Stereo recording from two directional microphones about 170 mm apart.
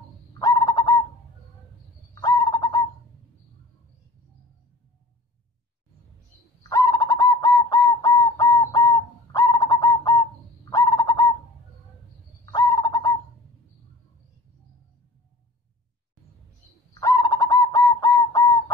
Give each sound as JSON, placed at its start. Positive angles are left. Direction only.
{"t": 0.4, "sound": "bird", "side_deg": 20}
{"t": 2.1, "sound": "bird", "side_deg": 20}
{"t": 6.7, "sound": "bird", "side_deg": 20}
{"t": 12.4, "sound": "bird", "side_deg": 20}
{"t": 17.0, "sound": "bird", "side_deg": 20}